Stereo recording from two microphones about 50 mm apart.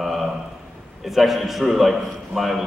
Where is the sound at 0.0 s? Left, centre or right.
Centre.